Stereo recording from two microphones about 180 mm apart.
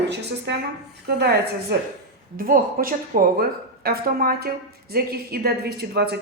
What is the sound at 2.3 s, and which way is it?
A woman's voice, 55° right (ahead or behind).